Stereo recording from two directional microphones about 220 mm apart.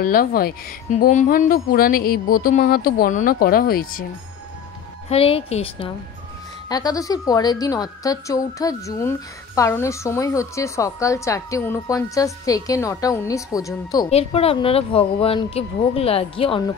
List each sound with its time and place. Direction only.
0.0 s speech: 40° left (ahead or behind)
5.1 s a woman's voice: 25° left (ahead or behind)
14.1 s speech: 25° left (ahead or behind)